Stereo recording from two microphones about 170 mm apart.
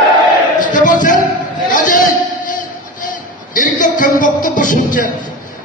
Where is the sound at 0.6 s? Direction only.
50° left (ahead or behind).